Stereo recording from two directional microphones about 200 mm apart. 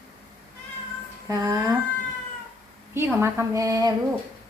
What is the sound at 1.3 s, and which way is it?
Speech, 15° right (ahead or behind).